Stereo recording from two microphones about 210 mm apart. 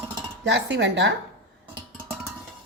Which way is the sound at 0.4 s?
55° right (ahead or behind).